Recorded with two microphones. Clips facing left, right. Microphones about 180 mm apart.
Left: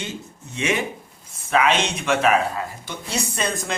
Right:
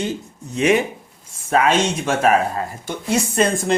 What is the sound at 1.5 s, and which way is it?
Speech, 40° right (ahead or behind).